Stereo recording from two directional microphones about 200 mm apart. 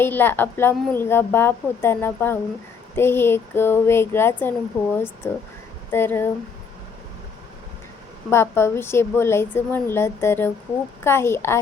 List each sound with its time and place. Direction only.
0.0 s a woman's voice: 10° left (ahead or behind)
8.3 s a woman's voice: 15° left (ahead or behind)